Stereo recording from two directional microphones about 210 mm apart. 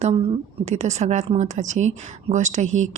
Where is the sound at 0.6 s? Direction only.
30° right (ahead or behind).